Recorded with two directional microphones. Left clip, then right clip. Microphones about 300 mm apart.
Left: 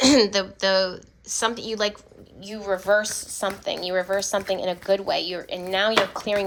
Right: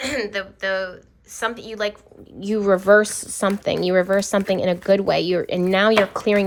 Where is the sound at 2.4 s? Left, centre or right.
Centre.